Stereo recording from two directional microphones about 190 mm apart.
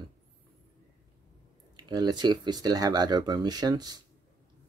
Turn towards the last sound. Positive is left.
turn(degrees=-20)  # may be behind; listen again after turning